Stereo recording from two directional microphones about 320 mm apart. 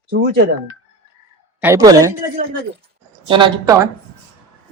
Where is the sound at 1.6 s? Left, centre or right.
Centre.